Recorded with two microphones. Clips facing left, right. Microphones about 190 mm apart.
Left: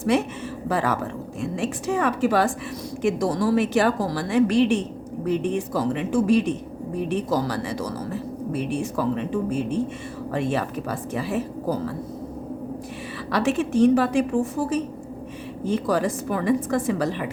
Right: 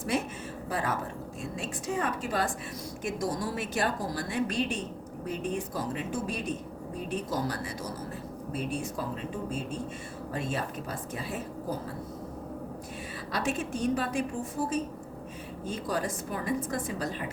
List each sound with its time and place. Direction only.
0.0 s a woman's voice: 75° left (ahead or behind)
10.3 s speech: 90° left
11.1 s speech: 80° left
13.3 s a woman's voice: 90° left
15.9 s a woman's voice: 85° left